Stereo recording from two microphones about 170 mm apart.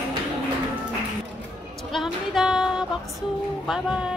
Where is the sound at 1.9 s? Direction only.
Centre (ahead or behind).